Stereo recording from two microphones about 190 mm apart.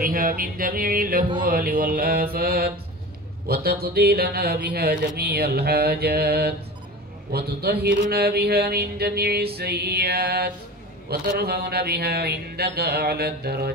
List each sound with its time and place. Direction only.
0.0 s speech: 45° right (ahead or behind)
3.4 s mantra: 55° right (ahead or behind)